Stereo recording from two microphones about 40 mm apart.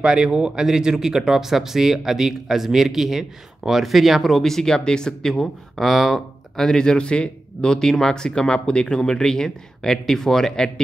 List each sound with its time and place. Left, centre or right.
0.0 s speech: right; by 5.3 s centre
5.3 s speech: centre
6.5 s a man's voice: centre
8.3 s a man's voice: left